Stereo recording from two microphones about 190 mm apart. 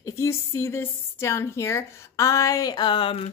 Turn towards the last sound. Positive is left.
turn(degrees=25)  # may be behind; listen again after turning